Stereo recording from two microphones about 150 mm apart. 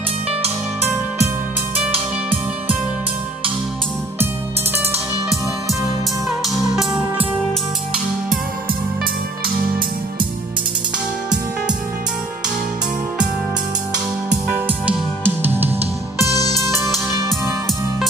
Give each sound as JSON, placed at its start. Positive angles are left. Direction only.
{"t": 6.4, "sound": "music", "side_deg": 0}
{"t": 14.3, "sound": "music", "side_deg": -10}
{"t": 16.3, "sound": "music", "side_deg": 25}